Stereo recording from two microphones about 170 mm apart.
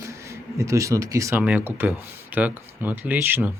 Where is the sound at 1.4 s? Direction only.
10° right (ahead or behind).